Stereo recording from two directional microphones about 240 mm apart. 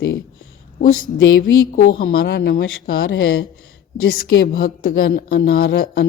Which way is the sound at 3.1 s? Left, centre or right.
Left.